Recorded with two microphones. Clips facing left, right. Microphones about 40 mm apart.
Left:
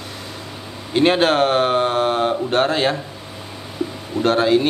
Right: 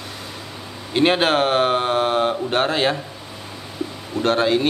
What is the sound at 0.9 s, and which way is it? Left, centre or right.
Mantra, centre.